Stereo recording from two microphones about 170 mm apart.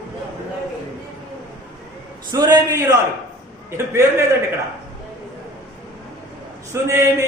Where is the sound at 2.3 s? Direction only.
25° right (ahead or behind).